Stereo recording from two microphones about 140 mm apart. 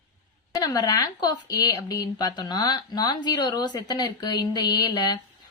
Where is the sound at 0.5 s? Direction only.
25° left (ahead or behind).